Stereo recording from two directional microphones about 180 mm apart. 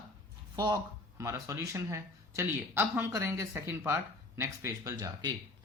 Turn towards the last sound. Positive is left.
turn(degrees=-20)  # may be behind; listen again after turning